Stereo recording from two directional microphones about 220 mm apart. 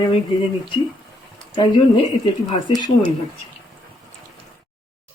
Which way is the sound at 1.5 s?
20° left (ahead or behind).